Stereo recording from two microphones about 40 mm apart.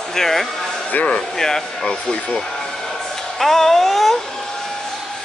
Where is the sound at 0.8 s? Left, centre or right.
Left.